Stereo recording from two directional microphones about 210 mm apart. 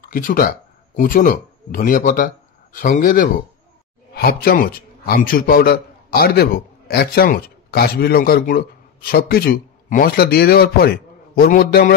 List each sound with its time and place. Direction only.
0.0 s a man's voice: 40° left (ahead or behind)